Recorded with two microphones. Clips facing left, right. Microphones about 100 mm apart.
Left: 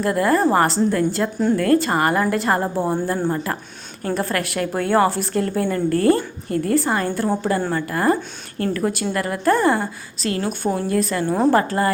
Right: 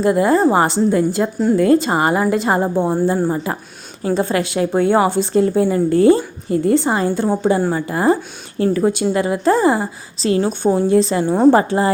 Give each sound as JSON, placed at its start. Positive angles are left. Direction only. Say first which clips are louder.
{"t": 0.0, "sound": "a woman's voice", "louder": "right 4 dB", "side_deg": -20}